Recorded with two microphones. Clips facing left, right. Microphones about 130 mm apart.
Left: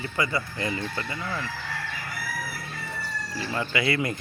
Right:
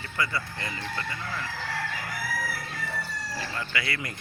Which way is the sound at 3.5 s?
25° left (ahead or behind).